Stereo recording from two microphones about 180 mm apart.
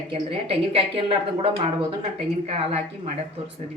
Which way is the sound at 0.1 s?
30° right (ahead or behind).